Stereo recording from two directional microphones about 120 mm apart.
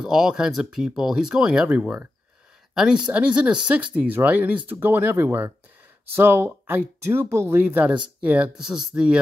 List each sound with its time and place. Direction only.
0.0 s speech: 5° right (ahead or behind)